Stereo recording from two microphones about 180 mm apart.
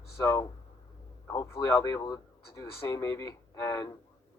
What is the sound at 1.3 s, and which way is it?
Speech, 15° left (ahead or behind).